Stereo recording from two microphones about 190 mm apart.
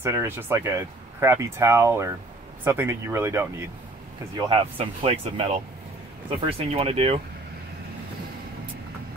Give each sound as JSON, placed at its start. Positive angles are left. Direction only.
{"t": 0.0, "sound": "speech", "side_deg": -15}
{"t": 4.4, "sound": "speech", "side_deg": -25}
{"t": 6.6, "sound": "speech", "side_deg": -30}